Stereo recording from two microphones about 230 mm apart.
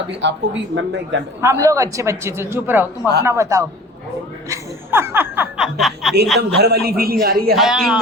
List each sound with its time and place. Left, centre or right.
0.2 s a woman's voice: right
1.4 s a man's voice: centre
6.6 s a man's voice: right
7.5 s a man's voice: centre